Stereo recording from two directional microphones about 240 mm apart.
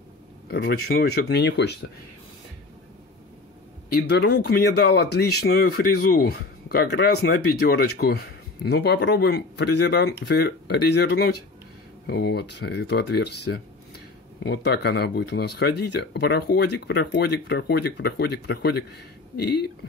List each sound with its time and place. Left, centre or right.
0.5 s speech: left
3.9 s speech: left